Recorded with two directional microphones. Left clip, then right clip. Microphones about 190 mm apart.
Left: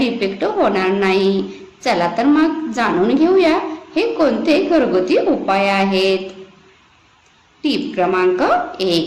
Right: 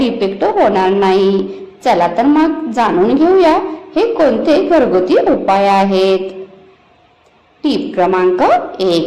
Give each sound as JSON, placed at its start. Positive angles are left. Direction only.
{"t": 0.0, "sound": "a woman's voice", "side_deg": -15}
{"t": 7.6, "sound": "a woman's voice", "side_deg": -20}